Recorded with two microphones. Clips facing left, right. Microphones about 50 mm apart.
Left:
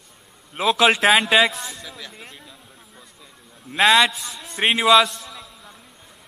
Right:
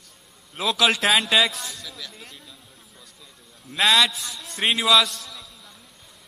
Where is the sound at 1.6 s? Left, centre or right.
Left.